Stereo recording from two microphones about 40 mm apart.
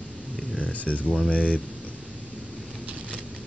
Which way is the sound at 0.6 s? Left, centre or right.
Left.